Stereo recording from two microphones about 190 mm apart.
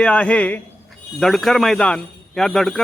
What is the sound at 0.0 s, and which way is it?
A man's voice, 5° left (ahead or behind).